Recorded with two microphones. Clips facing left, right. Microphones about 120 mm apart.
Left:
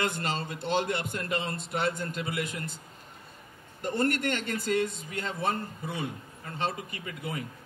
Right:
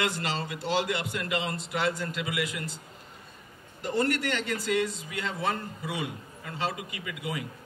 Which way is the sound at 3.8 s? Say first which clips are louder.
Right 1 dB; 50° left (ahead or behind).